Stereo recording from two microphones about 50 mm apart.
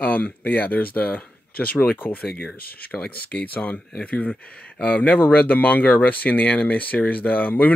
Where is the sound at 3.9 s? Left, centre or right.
Left.